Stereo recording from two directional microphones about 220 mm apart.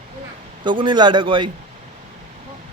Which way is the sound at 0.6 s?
20° right (ahead or behind).